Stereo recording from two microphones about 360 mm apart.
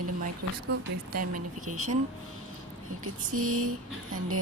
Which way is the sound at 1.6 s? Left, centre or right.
Right.